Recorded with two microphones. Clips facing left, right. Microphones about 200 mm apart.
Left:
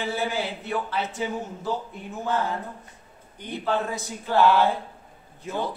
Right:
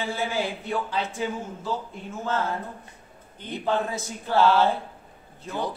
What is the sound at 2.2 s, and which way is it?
Speech, 15° left (ahead or behind).